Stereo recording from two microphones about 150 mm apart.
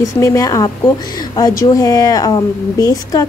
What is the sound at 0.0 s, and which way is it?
A woman's voice, 20° left (ahead or behind).